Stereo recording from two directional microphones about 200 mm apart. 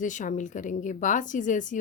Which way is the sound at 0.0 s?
40° left (ahead or behind).